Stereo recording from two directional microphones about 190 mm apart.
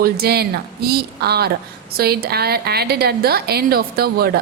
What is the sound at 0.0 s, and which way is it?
A woman's voice, 55° right (ahead or behind).